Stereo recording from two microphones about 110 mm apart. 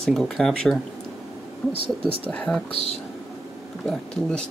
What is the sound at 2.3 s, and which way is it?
Speech, 10° left (ahead or behind).